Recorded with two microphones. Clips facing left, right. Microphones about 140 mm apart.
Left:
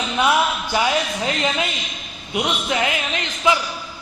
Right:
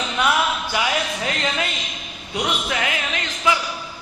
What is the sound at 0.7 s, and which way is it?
Speech, 25° left (ahead or behind).